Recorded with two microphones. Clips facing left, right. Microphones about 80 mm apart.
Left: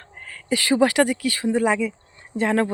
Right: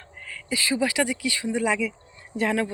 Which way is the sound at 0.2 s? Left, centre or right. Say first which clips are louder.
Even; left.